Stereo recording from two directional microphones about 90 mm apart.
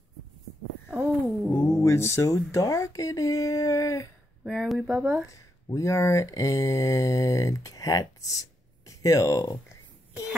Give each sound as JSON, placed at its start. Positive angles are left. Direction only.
{"t": 0.8, "sound": "a sound", "side_deg": -10}
{"t": 1.6, "sound": "speech", "side_deg": 30}
{"t": 4.5, "sound": "speech", "side_deg": -5}
{"t": 5.3, "sound": "speech", "side_deg": 35}